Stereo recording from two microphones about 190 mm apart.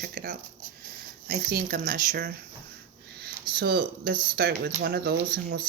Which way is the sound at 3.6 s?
55° right (ahead or behind).